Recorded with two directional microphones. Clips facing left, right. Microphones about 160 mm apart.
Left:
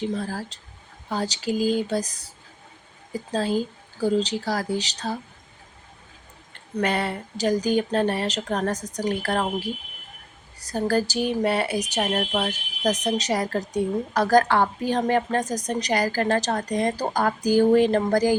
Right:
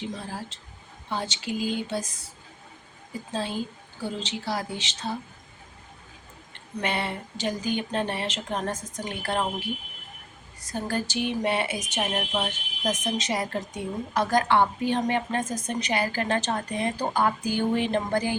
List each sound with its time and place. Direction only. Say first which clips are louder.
0.3 s speech: left 4 dB; 40° left (ahead or behind)
3.3 s speech: left 6 dB; 40° left (ahead or behind)
6.8 s speech: left 4 dB; 40° left (ahead or behind)